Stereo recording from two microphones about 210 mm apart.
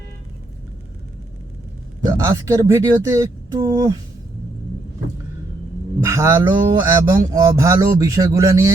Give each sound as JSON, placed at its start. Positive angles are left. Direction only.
{"t": 2.2, "sound": "speech", "side_deg": -15}
{"t": 6.0, "sound": "speech", "side_deg": -10}